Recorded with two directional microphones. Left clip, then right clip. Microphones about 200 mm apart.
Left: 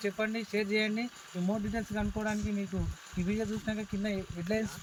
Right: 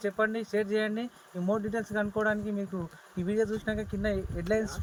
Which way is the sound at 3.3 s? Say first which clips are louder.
Right 8 dB; 15° right (ahead or behind).